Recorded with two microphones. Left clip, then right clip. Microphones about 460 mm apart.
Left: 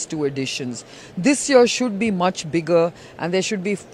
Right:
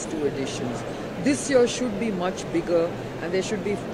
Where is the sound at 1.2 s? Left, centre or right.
Left.